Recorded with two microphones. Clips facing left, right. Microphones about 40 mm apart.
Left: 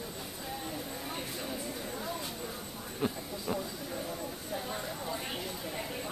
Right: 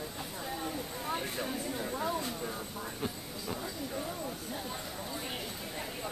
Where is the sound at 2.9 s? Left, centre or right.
Centre.